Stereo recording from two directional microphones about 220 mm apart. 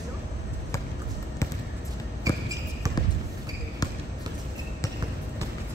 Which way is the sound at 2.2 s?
15° right (ahead or behind).